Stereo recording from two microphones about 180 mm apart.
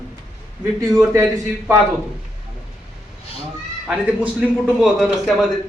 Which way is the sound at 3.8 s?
5° right (ahead or behind).